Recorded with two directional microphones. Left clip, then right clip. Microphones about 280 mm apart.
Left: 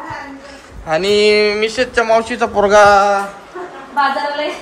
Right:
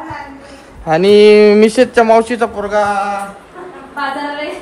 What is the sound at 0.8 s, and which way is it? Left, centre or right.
Speech, centre.